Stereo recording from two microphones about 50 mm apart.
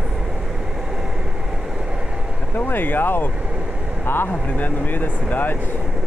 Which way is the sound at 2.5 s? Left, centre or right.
Left.